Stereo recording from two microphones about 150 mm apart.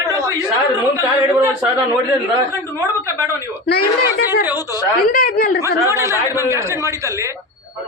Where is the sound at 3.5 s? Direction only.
90° left.